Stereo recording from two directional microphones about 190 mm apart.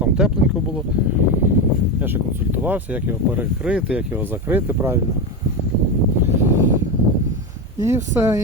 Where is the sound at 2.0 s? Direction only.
10° right (ahead or behind).